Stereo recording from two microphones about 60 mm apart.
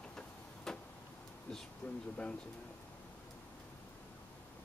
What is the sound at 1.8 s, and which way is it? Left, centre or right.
Speech, left.